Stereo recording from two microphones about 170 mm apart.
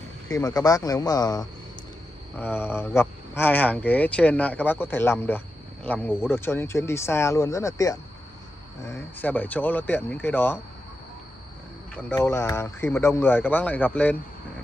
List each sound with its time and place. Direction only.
0.3 s speech: 20° left (ahead or behind)
11.9 s speech: 15° left (ahead or behind)